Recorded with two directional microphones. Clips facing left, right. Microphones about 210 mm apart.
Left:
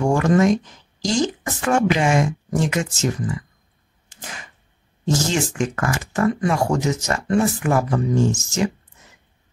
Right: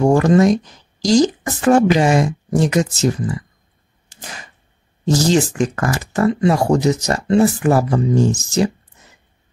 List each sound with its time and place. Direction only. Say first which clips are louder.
0.0 s speech: right 4 dB; 35° right (ahead or behind)
4.1 s arrow: right 2 dB; 35° right (ahead or behind)
5.0 s speech: right 6 dB; 35° right (ahead or behind)